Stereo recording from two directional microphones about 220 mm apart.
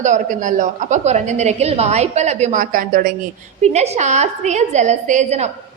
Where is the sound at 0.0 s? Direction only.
35° right (ahead or behind).